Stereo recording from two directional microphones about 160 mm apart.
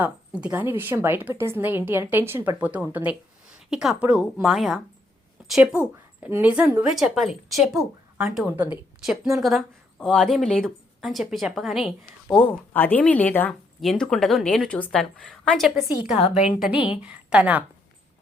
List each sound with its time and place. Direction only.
0.0 s a woman's voice: 10° right (ahead or behind)
8.4 s a woman's voice: 10° right (ahead or behind)
9.0 s a woman's voice: centre (ahead or behind)
16.1 s a woman's voice: 45° left (ahead or behind)
16.5 s a woman's voice: 5° right (ahead or behind)